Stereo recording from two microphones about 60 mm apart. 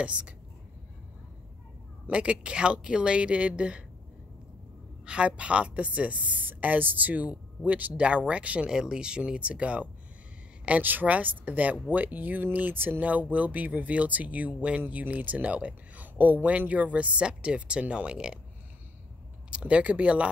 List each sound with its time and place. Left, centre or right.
0.0 s speech: centre
2.0 s speech: centre
5.0 s speech: centre
19.5 s speech: right